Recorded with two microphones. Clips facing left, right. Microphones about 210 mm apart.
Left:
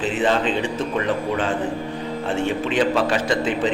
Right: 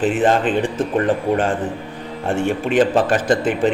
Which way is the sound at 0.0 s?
50° right (ahead or behind).